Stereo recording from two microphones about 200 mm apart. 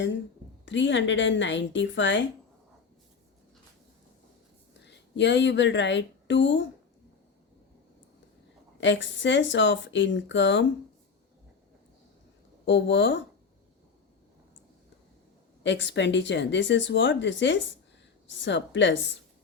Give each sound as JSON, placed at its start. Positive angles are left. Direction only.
{"t": 0.6, "sound": "a woman's voice", "side_deg": 65}
{"t": 5.1, "sound": "speech", "side_deg": 60}
{"t": 8.8, "sound": "speech", "side_deg": 65}
{"t": 12.6, "sound": "speech", "side_deg": 65}
{"t": 15.6, "sound": "speech", "side_deg": 65}